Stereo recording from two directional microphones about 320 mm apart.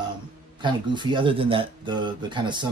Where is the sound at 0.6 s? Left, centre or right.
Centre.